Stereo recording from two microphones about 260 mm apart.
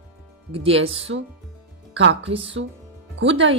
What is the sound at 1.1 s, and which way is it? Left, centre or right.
Speech, right.